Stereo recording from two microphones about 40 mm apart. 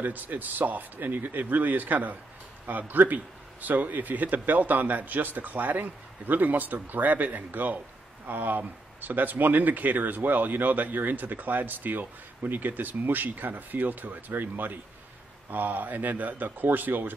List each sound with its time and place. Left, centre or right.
0.0 s speech: right